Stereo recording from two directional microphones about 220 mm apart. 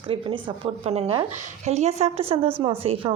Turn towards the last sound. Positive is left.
turn(degrees=-25)  # may be behind; listen again after turning